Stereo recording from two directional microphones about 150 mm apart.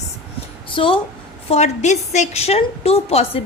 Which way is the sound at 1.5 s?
50° left (ahead or behind).